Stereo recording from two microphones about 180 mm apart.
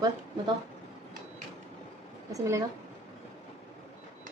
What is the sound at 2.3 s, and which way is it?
Speech, 15° right (ahead or behind).